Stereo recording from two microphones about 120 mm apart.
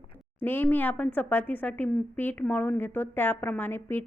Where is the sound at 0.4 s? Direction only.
15° left (ahead or behind).